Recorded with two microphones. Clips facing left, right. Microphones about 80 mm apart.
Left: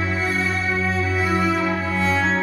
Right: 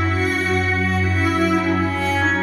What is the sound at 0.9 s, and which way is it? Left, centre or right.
Music, right.